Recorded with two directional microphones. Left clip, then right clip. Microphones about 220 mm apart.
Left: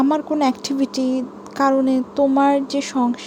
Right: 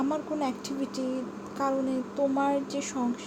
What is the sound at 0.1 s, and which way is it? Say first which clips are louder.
A woman's voice: left 11 dB; 45° left (ahead or behind).